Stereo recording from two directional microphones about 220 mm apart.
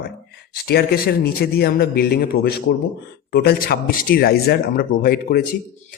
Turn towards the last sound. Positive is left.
turn(degrees=40)  # may be behind; listen again after turning